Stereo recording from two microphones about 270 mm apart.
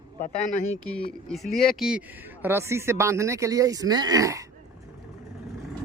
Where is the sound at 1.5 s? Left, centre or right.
Centre.